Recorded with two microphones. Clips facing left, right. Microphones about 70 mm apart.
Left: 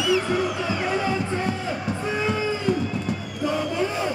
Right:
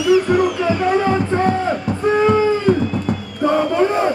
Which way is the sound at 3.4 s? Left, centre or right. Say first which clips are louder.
Right 9 dB; right.